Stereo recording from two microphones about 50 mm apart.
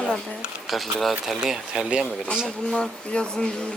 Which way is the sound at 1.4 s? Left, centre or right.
Centre.